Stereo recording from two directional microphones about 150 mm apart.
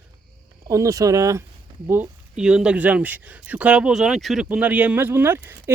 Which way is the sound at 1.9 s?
10° right (ahead or behind).